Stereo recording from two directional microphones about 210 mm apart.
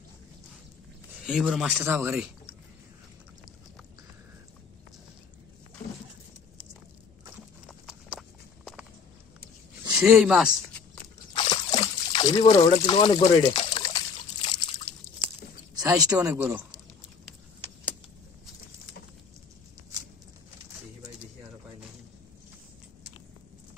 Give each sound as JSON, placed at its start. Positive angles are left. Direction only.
{"t": 1.2, "sound": "speech", "side_deg": 0}
{"t": 7.6, "sound": "clip-clop", "side_deg": 0}
{"t": 9.9, "sound": "speech", "side_deg": 0}
{"t": 11.3, "sound": "trickle", "side_deg": 25}
{"t": 15.8, "sound": "speech", "side_deg": -15}